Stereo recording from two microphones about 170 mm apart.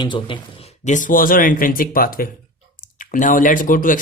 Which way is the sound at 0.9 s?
50° left (ahead or behind).